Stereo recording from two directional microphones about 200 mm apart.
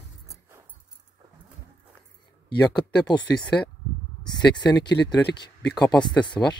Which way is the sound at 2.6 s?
15° left (ahead or behind).